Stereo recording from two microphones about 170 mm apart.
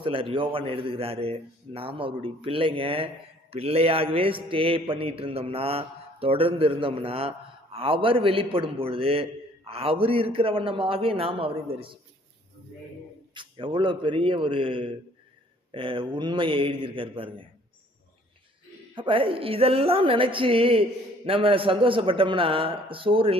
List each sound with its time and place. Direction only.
0.0 s mantra: 30° right (ahead or behind)
13.3 s a man's voice: 30° right (ahead or behind)
15.7 s mantra: 30° right (ahead or behind)
18.9 s mantra: 30° right (ahead or behind)